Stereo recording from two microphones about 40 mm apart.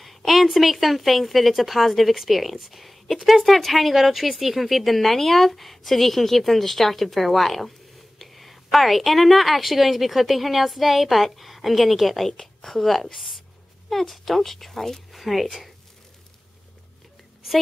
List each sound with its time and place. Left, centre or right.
0.0 s a woman's voice: centre